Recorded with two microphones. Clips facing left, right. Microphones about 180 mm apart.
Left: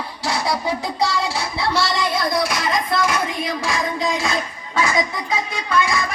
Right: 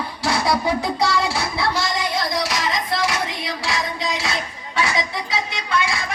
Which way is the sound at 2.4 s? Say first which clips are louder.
Left 2 dB; 50° left (ahead or behind).